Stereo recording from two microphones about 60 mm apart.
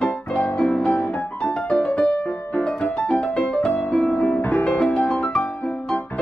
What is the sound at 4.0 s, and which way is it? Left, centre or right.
Music, centre.